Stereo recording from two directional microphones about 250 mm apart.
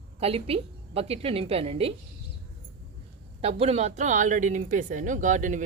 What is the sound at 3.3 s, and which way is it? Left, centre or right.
Speech, right.